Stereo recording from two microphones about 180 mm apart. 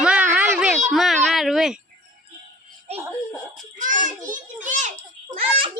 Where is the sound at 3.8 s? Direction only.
45° right (ahead or behind).